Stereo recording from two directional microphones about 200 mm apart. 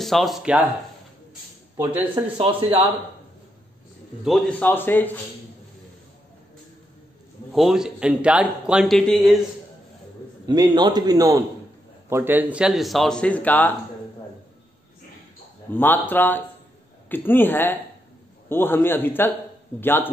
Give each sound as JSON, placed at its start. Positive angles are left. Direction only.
{"t": 0.0, "sound": "a man's voice", "side_deg": 0}
{"t": 2.3, "sound": "a man's voice", "side_deg": -30}
{"t": 4.2, "sound": "a man's voice", "side_deg": 5}
{"t": 7.5, "sound": "a man's voice", "side_deg": 0}
{"t": 10.4, "sound": "a man's voice", "side_deg": -20}
{"t": 15.7, "sound": "a man's voice", "side_deg": 10}